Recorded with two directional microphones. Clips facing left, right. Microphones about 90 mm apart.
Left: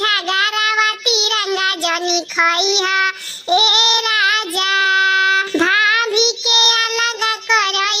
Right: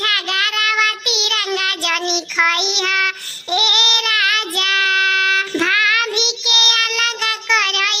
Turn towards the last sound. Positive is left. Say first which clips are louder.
# left 2 dB
turn(degrees=25)  # may be behind; listen again after turning